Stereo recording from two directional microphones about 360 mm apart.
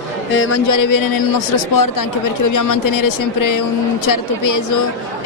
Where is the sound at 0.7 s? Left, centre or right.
Left.